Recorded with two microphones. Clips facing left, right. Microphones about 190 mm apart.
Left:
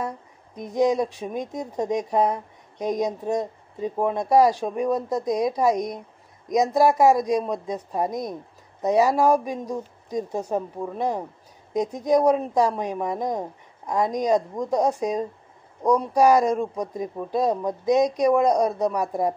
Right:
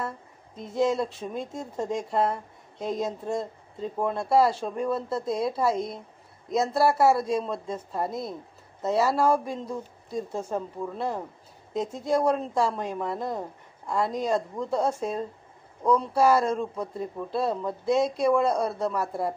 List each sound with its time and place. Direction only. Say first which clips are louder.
0.6 s speech: left 4 dB; 15° left (ahead or behind)